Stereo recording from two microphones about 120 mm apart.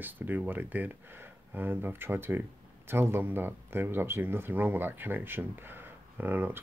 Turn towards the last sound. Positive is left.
turn(degrees=-15)  # may be behind; listen again after turning